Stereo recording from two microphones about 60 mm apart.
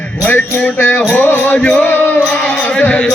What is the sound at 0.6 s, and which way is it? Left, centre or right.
Music, left.